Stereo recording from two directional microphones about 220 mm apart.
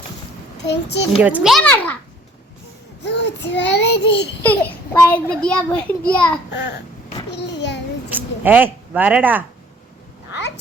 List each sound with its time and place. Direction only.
0.7 s a child's voice: 50° left (ahead or behind)
1.2 s a child's voice: 5° right (ahead or behind)
3.0 s a child's voice: 50° left (ahead or behind)
4.4 s a child's voice: 10° left (ahead or behind)
6.5 s a child's voice: 50° left (ahead or behind)
7.3 s a sound: 50° left (ahead or behind)
8.1 s speech: 10° right (ahead or behind)